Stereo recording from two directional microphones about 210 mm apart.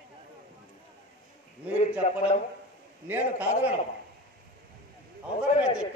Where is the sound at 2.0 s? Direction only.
30° left (ahead or behind).